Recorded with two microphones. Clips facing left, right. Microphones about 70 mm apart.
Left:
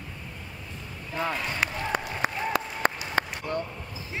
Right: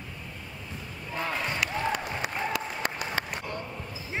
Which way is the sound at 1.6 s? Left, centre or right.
Left.